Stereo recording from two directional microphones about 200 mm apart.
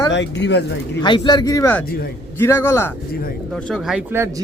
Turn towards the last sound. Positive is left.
turn(degrees=-10)  # may be behind; listen again after turning